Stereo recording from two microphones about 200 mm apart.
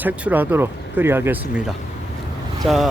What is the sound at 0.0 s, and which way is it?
Speech, 10° right (ahead or behind).